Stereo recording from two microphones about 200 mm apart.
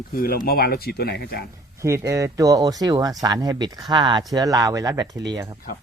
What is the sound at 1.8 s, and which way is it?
Speech, 15° right (ahead or behind).